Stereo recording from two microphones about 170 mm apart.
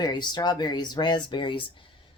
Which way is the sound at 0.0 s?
25° left (ahead or behind).